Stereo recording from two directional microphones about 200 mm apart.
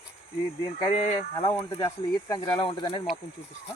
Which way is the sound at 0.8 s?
30° left (ahead or behind).